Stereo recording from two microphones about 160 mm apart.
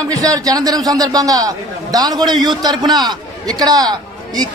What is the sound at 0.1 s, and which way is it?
A man's voice, 20° right (ahead or behind).